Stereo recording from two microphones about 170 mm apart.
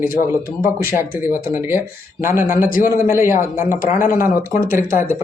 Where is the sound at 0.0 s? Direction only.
55° left (ahead or behind).